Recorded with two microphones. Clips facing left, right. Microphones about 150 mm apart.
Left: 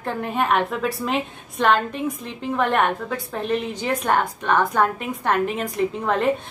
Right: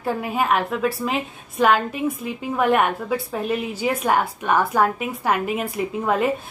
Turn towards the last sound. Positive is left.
turn(degrees=-5)  # may be behind; listen again after turning